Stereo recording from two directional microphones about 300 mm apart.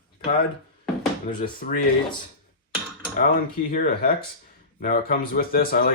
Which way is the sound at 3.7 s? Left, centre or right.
Left.